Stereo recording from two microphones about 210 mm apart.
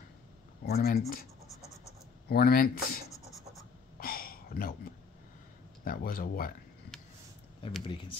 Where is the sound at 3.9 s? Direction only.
45° left (ahead or behind).